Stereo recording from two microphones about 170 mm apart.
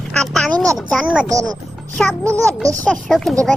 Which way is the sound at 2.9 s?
Centre (ahead or behind).